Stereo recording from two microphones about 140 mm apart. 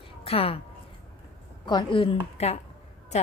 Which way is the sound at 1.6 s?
35° left (ahead or behind).